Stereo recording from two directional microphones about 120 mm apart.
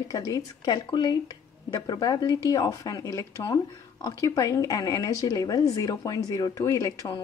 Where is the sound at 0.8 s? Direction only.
40° left (ahead or behind).